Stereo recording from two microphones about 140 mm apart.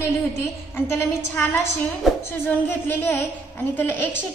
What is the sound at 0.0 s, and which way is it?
A woman's voice, 15° left (ahead or behind).